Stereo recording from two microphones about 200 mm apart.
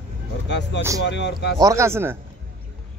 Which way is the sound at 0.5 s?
60° left (ahead or behind).